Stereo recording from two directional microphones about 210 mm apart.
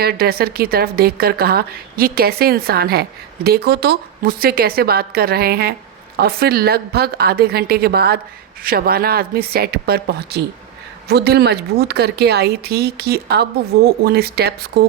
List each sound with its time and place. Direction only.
0.0 s a woman's voice: 50° right (ahead or behind)